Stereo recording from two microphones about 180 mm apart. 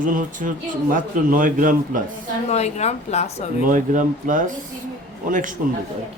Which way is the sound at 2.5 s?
40° left (ahead or behind).